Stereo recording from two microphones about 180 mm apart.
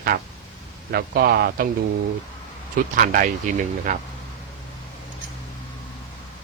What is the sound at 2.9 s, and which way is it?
Speech, 50° right (ahead or behind).